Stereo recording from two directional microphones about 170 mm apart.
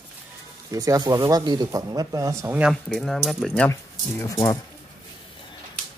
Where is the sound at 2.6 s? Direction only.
5° left (ahead or behind).